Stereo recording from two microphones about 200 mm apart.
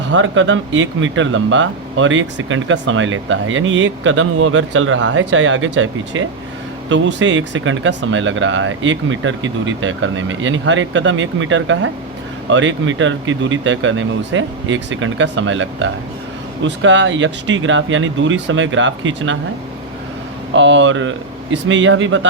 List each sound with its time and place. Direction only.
0.1 s speech: 70° right (ahead or behind)
6.8 s speech: 65° right (ahead or behind)
20.5 s speech: 65° right (ahead or behind)